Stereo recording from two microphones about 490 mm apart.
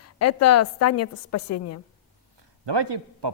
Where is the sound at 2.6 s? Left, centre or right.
Right.